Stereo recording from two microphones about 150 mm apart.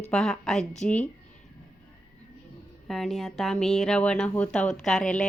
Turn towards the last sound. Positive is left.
turn(degrees=5)  # may be behind; listen again after turning